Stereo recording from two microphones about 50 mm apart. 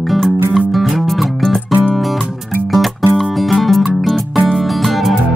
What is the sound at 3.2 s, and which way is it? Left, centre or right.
Music, centre.